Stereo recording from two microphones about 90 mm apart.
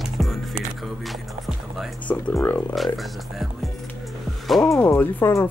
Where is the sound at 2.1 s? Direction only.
30° left (ahead or behind).